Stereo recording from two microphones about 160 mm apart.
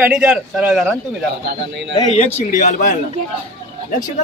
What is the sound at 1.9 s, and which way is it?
Speech, 35° left (ahead or behind).